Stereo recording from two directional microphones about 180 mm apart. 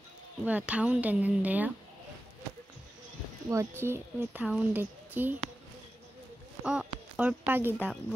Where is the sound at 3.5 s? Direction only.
15° right (ahead or behind).